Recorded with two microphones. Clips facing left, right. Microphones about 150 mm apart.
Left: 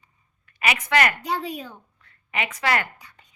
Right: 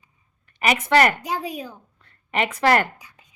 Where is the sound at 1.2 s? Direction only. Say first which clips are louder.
Even; 10° right (ahead or behind).